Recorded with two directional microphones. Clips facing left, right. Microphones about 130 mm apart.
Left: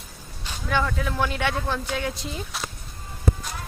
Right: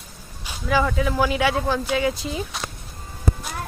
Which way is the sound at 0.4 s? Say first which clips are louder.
Right 4 dB; 5° right (ahead or behind).